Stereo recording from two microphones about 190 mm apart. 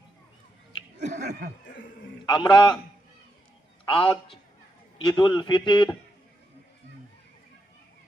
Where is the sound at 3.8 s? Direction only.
25° left (ahead or behind).